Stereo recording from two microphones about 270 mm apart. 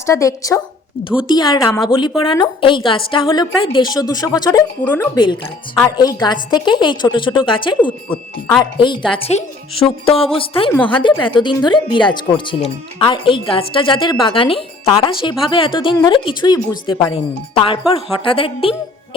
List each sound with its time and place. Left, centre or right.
0.0 s a woman's voice: centre
7.8 s speech: centre
8.8 s speech: centre
10.7 s speech: centre
10.9 s a woman's voice: centre